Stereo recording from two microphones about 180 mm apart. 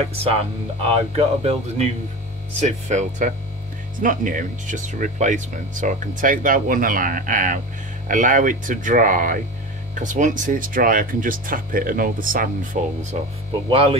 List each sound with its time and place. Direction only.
0.0 s speech: 35° right (ahead or behind)
13.7 s speech: 30° right (ahead or behind)